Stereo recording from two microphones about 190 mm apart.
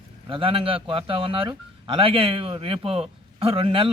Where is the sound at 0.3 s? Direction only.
30° right (ahead or behind).